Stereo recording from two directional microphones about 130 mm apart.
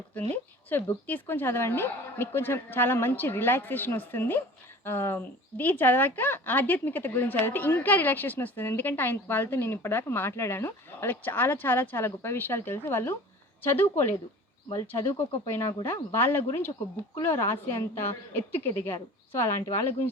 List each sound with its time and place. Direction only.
0.1 s speech: 10° left (ahead or behind)